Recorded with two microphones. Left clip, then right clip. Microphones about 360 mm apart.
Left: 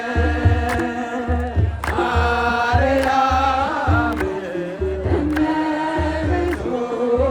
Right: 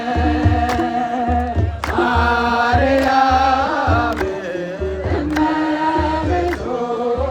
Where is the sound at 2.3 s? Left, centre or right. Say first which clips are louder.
Right 3 dB; centre.